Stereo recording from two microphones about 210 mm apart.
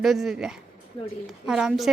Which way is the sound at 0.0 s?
Centre (ahead or behind).